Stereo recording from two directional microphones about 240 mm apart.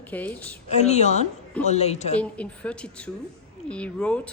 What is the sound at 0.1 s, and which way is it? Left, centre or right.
Speech, centre.